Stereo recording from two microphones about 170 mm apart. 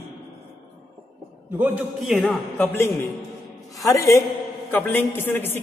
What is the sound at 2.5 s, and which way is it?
A man's voice, 15° left (ahead or behind).